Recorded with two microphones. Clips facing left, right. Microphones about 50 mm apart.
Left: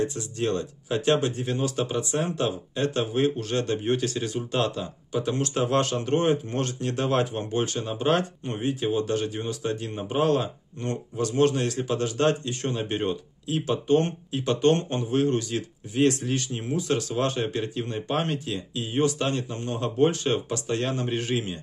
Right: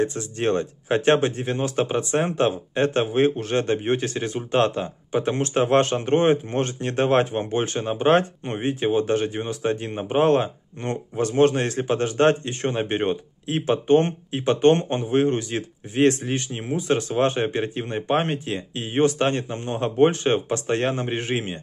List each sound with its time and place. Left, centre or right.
0.0 s speech: right